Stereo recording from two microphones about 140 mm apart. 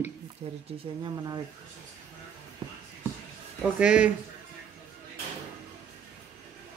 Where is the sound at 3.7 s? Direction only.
10° right (ahead or behind).